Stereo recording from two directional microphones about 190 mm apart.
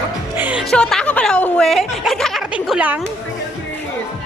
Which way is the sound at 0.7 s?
5° left (ahead or behind).